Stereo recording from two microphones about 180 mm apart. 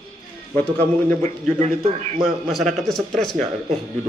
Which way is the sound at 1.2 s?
40° right (ahead or behind).